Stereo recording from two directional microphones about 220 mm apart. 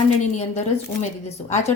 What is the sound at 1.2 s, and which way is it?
Speech, 30° left (ahead or behind).